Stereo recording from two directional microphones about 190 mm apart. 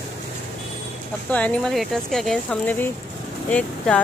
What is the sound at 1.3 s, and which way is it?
Speech, 5° left (ahead or behind).